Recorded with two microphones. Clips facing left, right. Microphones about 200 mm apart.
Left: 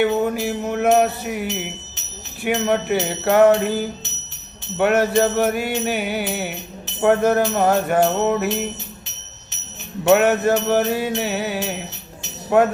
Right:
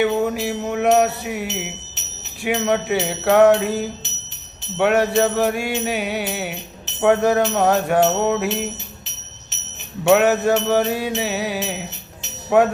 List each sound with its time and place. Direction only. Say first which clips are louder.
0.0 s music: even; centre (ahead or behind)
10.0 s music: even; centre (ahead or behind)